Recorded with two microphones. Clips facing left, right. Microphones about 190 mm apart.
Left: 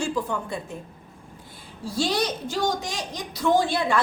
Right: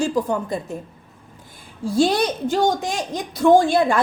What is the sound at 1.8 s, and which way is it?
A woman's voice, 55° right (ahead or behind).